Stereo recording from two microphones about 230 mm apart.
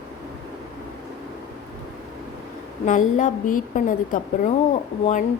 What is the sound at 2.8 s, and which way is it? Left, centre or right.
A woman's voice, left.